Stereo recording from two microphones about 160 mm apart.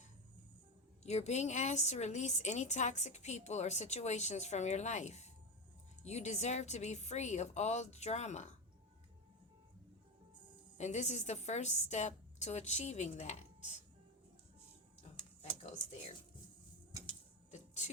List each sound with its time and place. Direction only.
1.0 s a woman's voice: 45° left (ahead or behind)
10.8 s a woman's voice: 45° left (ahead or behind)
17.5 s a sound: 45° left (ahead or behind)